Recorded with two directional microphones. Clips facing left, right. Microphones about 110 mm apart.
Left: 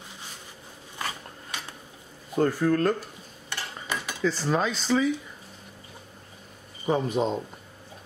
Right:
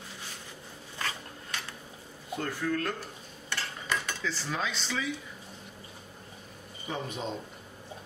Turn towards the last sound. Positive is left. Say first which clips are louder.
# left 11 dB
turn(degrees=40)  # may be behind; listen again after turning